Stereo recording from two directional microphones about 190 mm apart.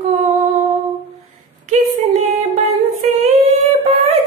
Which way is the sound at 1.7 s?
30° right (ahead or behind).